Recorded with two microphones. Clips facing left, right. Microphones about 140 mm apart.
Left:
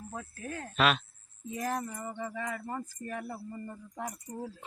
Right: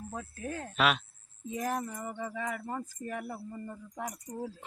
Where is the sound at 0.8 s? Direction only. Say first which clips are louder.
Left 1 dB; 5° right (ahead or behind).